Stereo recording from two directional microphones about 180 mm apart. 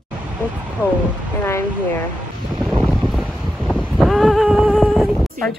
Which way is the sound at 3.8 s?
Centre (ahead or behind).